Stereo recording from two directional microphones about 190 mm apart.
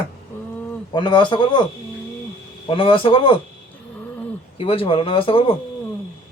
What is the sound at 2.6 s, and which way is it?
Speech, 25° left (ahead or behind).